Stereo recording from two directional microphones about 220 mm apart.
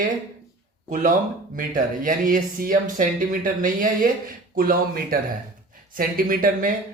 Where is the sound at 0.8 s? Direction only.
35° right (ahead or behind).